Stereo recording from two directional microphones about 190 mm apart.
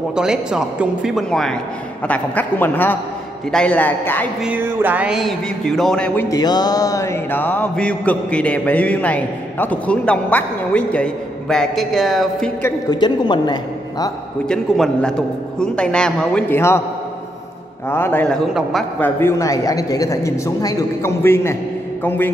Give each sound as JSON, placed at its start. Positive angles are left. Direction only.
{"t": 0.1, "sound": "a man's voice", "side_deg": -5}
{"t": 2.0, "sound": "music", "side_deg": 10}
{"t": 4.5, "sound": "a man's voice", "side_deg": -5}
{"t": 6.3, "sound": "music", "side_deg": 20}
{"t": 12.6, "sound": "a man's voice", "side_deg": 20}
{"t": 14.5, "sound": "a man's voice", "side_deg": 5}
{"t": 17.8, "sound": "music", "side_deg": 10}